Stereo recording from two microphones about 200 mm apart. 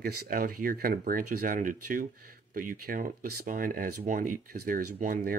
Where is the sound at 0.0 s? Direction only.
45° right (ahead or behind).